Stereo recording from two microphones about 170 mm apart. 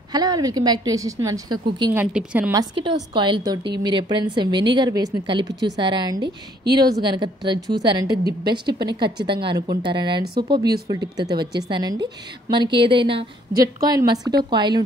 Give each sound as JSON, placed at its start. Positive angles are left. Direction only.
{"t": 0.1, "sound": "a woman's voice", "side_deg": -25}
{"t": 2.0, "sound": "a woman's voice", "side_deg": -10}
{"t": 2.5, "sound": "a woman's voice", "side_deg": -30}